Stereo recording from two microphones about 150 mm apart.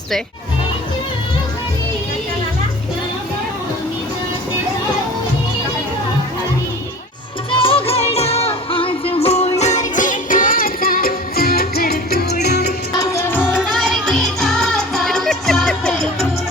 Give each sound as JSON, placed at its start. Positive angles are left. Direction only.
{"t": 7.5, "sound": "music", "side_deg": 35}
{"t": 13.0, "sound": "music", "side_deg": 15}
{"t": 13.7, "sound": "music", "side_deg": 5}